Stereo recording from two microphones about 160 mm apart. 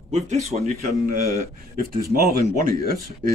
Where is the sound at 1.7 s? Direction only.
65° right (ahead or behind).